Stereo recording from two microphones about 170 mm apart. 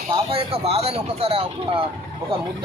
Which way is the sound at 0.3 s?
35° right (ahead or behind).